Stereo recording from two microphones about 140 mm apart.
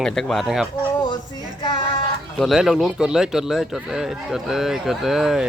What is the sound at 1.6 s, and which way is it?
Music, 35° left (ahead or behind).